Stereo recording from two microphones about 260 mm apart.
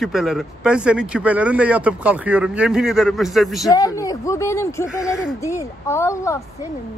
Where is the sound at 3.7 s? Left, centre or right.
Centre.